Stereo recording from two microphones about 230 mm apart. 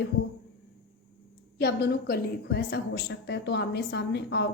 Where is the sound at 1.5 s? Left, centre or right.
Left.